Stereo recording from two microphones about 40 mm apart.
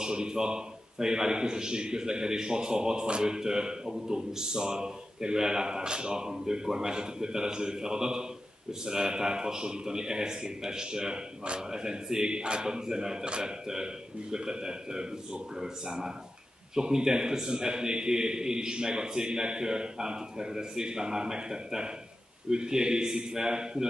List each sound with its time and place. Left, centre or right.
0.0 s a man's voice: centre